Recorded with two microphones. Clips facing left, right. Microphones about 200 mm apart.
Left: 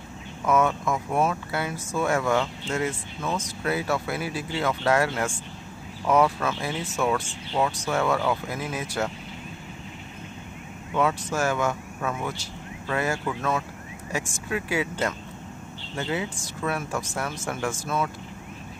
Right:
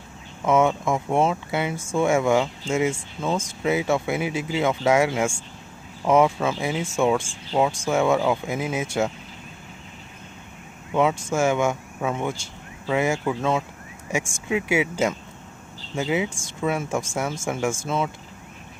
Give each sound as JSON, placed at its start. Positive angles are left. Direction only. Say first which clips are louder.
{"t": 0.5, "sound": "speech", "louder": "right 3 dB", "side_deg": -25}
{"t": 2.1, "sound": "speech", "louder": "right 4 dB", "side_deg": -10}
{"t": 3.6, "sound": "speech", "louder": "right 4 dB", "side_deg": -20}
{"t": 4.8, "sound": "speech", "louder": "right 3 dB", "side_deg": -10}
{"t": 6.0, "sound": "speech", "louder": "right 3 dB", "side_deg": -20}
{"t": 7.2, "sound": "speech", "louder": "right 4 dB", "side_deg": -20}
{"t": 11.0, "sound": "speech", "louder": "right 4 dB", "side_deg": -20}
{"t": 16.0, "sound": "speech", "louder": "right 5 dB", "side_deg": -15}